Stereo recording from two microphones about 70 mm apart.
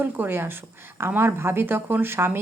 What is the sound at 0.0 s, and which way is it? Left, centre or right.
A woman's voice, right.